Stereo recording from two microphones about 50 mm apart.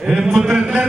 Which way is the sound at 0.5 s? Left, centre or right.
Right.